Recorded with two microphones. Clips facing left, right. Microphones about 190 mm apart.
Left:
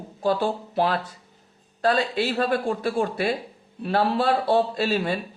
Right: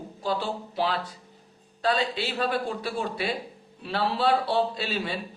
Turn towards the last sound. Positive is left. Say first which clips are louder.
# left 7 dB
turn(degrees=50)  # may be behind; listen again after turning